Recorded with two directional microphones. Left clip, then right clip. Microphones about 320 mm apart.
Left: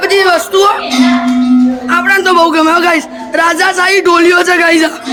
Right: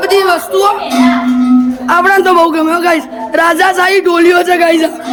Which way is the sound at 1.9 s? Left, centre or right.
Centre.